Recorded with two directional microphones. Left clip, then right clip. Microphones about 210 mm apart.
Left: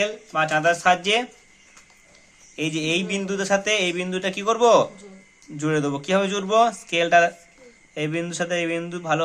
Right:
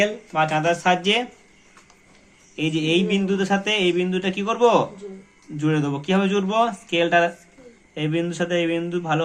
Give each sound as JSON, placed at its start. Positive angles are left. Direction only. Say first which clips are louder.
{"t": 0.0, "sound": "a man's voice", "louder": "right 2 dB", "side_deg": 25}
{"t": 2.6, "sound": "a man's voice", "louder": "right 3 dB", "side_deg": 25}